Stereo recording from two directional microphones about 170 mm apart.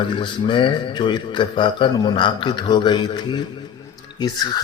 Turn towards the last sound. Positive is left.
turn(degrees=25)  # may be behind; listen again after turning